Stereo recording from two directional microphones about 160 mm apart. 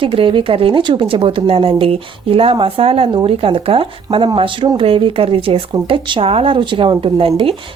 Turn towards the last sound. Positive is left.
turn(degrees=-35)  # may be behind; listen again after turning